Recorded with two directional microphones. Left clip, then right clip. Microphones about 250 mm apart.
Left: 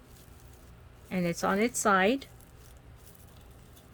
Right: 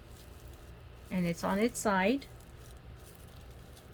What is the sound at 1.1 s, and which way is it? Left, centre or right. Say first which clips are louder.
A woman's voice: left 4 dB; left.